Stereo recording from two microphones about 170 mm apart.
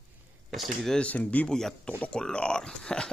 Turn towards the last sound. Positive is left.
turn(degrees=5)  # may be behind; listen again after turning